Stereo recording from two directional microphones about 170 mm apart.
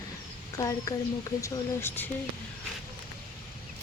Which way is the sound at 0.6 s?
20° left (ahead or behind).